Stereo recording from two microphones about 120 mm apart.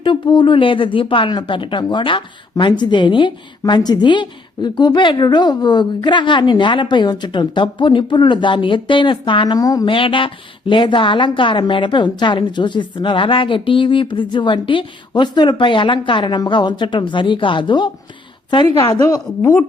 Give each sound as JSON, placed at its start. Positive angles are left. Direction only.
{"t": 0.0, "sound": "speech", "side_deg": 40}
{"t": 9.6, "sound": "speech", "side_deg": 30}
{"t": 18.9, "sound": "a woman's voice", "side_deg": 25}